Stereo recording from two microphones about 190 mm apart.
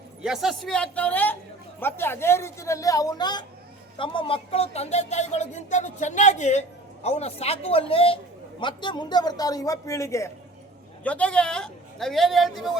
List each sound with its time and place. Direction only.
0.2 s a man's voice: centre (ahead or behind)